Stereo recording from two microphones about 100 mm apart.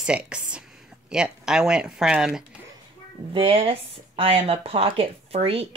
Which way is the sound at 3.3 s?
70° right (ahead or behind).